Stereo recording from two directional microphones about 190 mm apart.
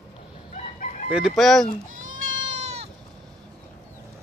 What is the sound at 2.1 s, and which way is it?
Goat, 40° right (ahead or behind).